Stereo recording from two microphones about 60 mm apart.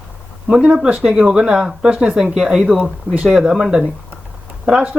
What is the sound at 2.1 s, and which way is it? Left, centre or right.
Speech, centre.